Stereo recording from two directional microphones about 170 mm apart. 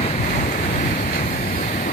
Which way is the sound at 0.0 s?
45° left (ahead or behind).